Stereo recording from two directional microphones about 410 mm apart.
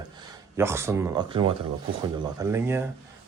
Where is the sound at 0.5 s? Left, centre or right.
Centre.